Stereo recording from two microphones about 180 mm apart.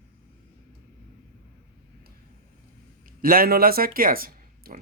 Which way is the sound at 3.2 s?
55° right (ahead or behind).